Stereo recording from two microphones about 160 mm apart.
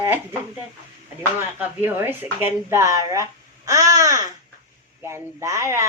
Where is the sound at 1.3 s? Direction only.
15° right (ahead or behind).